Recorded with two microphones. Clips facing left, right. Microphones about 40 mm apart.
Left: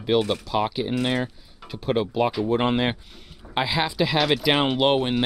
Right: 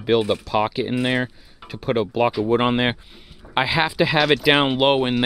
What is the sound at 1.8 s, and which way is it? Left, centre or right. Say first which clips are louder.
Speech: right 2 dB; centre.